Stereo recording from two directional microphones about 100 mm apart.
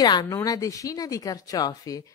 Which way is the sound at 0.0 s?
45° left (ahead or behind).